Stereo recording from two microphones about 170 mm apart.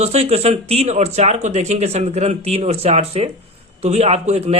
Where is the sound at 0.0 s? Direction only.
40° right (ahead or behind).